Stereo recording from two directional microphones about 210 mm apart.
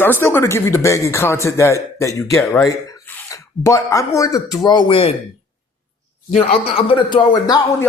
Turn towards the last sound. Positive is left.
turn(degrees=20)  # may be behind; listen again after turning